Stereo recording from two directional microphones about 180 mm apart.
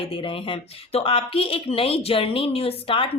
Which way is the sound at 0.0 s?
30° left (ahead or behind).